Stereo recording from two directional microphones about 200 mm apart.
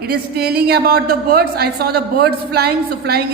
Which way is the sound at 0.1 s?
50° right (ahead or behind).